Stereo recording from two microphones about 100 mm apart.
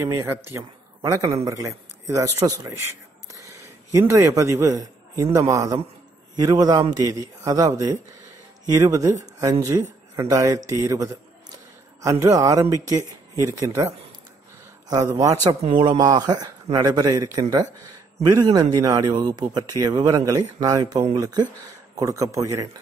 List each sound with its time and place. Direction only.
0.0 s speech: 25° right (ahead or behind)
1.0 s speech: 35° right (ahead or behind)
3.3 s a sound: 35° right (ahead or behind)
4.1 s speech: 30° right (ahead or behind)
15.7 s a man's voice: 45° right (ahead or behind); by 22.7 s 30° right (ahead or behind)